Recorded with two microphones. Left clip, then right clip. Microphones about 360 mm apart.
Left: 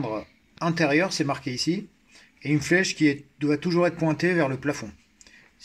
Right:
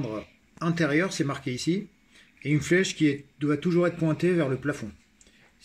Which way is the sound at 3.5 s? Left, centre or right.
Centre.